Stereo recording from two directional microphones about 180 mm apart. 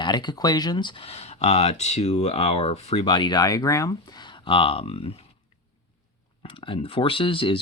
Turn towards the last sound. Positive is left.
turn(degrees=30)  # may be behind; listen again after turning